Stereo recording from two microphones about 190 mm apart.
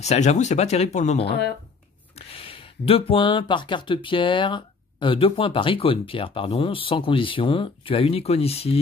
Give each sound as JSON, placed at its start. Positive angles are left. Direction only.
{"t": 0.0, "sound": "speech", "side_deg": 35}
{"t": 1.2, "sound": "speech", "side_deg": 60}
{"t": 2.1, "sound": "speech", "side_deg": 30}